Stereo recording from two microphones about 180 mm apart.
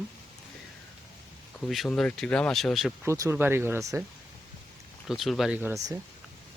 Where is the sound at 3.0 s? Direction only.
15° right (ahead or behind).